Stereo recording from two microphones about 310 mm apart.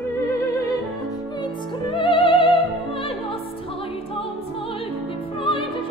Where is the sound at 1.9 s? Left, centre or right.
Centre.